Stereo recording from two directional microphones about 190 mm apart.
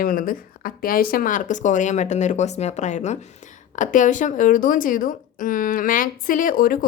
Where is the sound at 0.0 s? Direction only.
45° left (ahead or behind).